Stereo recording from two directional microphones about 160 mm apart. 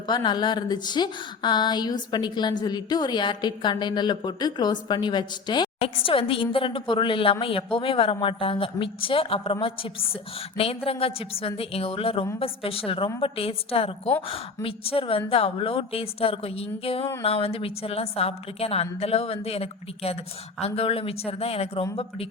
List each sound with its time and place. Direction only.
0.1 s a woman's voice: 25° left (ahead or behind)